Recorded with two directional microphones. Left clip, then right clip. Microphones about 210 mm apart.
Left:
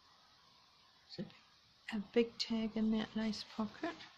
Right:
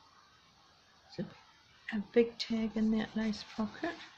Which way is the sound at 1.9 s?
15° left (ahead or behind).